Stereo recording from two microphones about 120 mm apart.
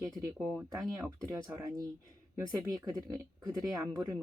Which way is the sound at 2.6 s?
30° right (ahead or behind).